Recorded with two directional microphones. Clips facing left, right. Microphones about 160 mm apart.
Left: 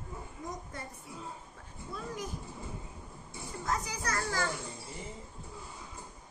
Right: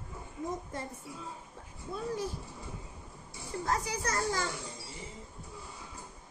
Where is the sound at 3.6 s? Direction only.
30° right (ahead or behind).